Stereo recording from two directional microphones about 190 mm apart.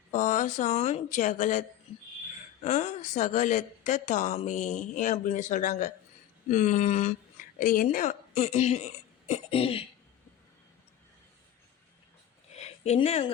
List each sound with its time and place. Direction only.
0.1 s a woman's voice: 40° left (ahead or behind)
2.6 s a woman's voice: 40° left (ahead or behind)
12.5 s a sound: 35° left (ahead or behind)